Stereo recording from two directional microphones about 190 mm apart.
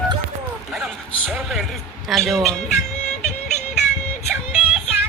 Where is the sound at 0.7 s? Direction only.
Centre (ahead or behind).